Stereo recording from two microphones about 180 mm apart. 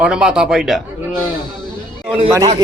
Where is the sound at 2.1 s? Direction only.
30° right (ahead or behind).